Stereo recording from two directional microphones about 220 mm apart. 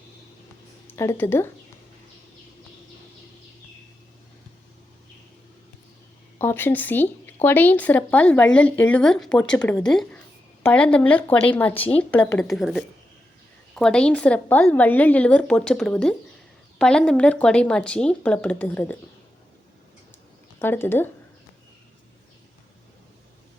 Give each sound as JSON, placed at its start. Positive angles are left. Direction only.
{"t": 0.9, "sound": "speech", "side_deg": 10}
{"t": 6.4, "sound": "a woman's voice", "side_deg": 10}
{"t": 20.6, "sound": "speech", "side_deg": 10}